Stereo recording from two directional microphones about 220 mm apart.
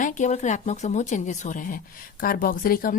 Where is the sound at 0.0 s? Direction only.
35° left (ahead or behind).